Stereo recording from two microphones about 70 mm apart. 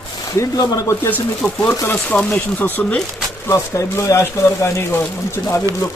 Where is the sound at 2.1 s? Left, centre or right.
Centre.